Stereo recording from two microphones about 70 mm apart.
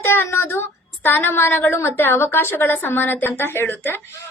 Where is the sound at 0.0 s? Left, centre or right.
Left.